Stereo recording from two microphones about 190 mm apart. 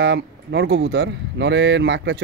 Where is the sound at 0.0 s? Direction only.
65° right (ahead or behind).